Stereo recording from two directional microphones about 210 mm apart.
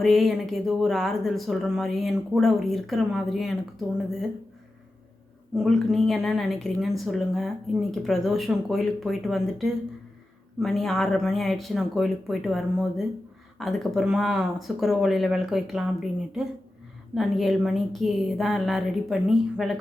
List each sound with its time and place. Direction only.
0.0 s speech: centre (ahead or behind)
5.5 s speech: centre (ahead or behind)
17.2 s speech: centre (ahead or behind)